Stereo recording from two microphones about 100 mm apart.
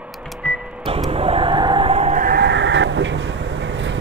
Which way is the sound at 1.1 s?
70° right (ahead or behind).